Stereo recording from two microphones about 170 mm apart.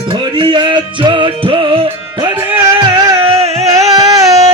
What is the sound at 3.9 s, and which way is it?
Music, 20° right (ahead or behind).